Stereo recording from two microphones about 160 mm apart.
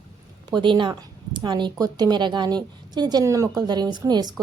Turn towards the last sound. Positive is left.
turn(degrees=-25)  # may be behind; listen again after turning